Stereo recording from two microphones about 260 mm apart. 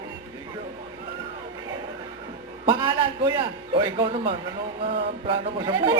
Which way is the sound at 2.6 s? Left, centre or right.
Centre.